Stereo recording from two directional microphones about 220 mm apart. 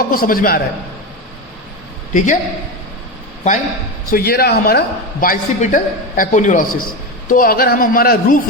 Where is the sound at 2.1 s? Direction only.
35° left (ahead or behind).